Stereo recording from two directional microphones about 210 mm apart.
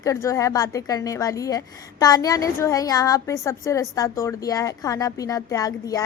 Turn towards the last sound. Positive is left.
turn(degrees=15)  # may be behind; listen again after turning